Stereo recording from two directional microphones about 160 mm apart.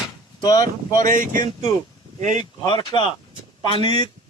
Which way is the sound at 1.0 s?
55° right (ahead or behind).